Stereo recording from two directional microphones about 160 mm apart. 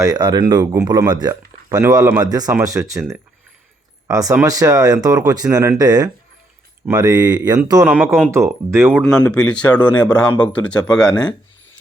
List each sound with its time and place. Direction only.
0.0 s speech: 25° right (ahead or behind)
4.0 s speech: 20° right (ahead or behind)
7.9 s speech: 10° right (ahead or behind)
8.9 s speech: 10° left (ahead or behind)